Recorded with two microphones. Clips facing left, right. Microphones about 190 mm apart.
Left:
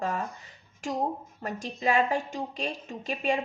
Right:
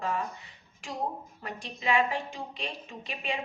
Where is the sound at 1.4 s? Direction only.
45° left (ahead or behind).